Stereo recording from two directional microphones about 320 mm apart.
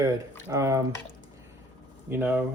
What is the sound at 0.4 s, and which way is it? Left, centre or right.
Speech, centre.